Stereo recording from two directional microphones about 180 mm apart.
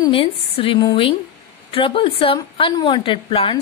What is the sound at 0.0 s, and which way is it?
A woman's voice, 30° left (ahead or behind).